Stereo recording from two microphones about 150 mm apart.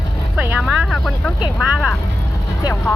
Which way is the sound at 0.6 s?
Centre (ahead or behind).